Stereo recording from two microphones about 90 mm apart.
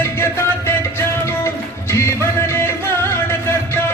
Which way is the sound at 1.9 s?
30° left (ahead or behind).